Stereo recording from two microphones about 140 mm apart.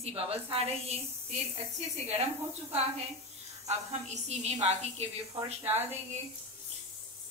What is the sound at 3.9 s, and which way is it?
A woman's voice, 55° right (ahead or behind).